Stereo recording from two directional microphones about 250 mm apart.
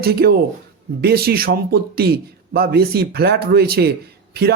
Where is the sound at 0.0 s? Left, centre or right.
Right.